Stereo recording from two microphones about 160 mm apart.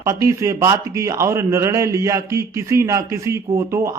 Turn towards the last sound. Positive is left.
turn(degrees=-20)  # may be behind; listen again after turning